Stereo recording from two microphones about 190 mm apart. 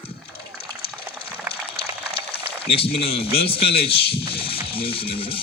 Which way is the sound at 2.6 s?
30° left (ahead or behind).